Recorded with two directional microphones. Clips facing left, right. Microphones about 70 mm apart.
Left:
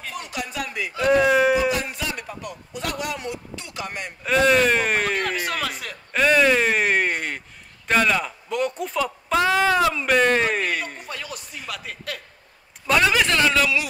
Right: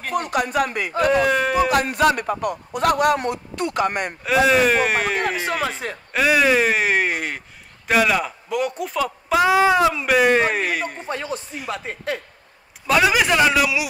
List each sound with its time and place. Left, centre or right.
0.0 s a man's voice: right
1.1 s speech: centre
1.7 s speech: right
4.2 s speech: centre
5.1 s a sound: centre
6.1 s a sound: centre
7.9 s speech: centre
11.0 s speech: right
12.8 s speech: centre